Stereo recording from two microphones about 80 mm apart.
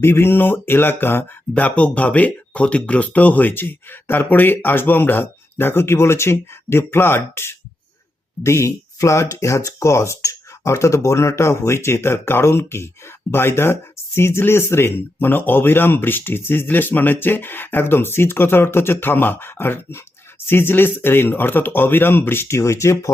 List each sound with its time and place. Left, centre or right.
0.0 s speech: left